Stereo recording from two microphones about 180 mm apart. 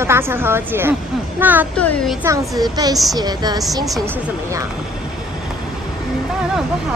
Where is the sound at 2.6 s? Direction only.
20° right (ahead or behind).